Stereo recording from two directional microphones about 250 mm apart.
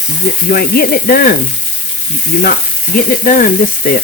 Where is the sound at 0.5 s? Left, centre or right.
Left.